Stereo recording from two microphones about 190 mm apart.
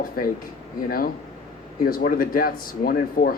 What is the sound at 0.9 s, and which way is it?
Speech, 50° left (ahead or behind).